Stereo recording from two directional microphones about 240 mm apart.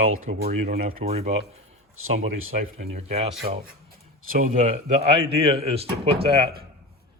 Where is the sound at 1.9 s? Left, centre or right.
Right.